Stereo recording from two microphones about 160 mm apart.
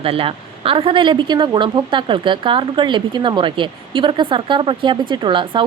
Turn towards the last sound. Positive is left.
turn(degrees=-30)  # may be behind; listen again after turning